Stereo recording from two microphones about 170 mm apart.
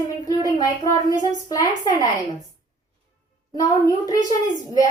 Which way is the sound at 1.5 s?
20° left (ahead or behind).